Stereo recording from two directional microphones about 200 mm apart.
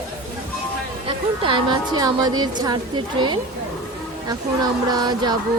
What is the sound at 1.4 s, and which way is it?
Speech, 25° right (ahead or behind).